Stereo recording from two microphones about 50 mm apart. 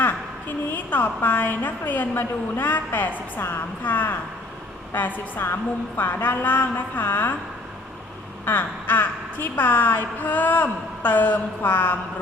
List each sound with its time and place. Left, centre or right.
0.0 s a woman's voice: left
8.4 s a woman's voice: left